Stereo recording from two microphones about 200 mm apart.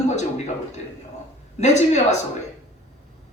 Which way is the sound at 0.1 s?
35° left (ahead or behind).